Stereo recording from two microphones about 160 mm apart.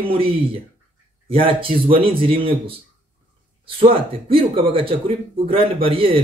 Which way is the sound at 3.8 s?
65° right (ahead or behind).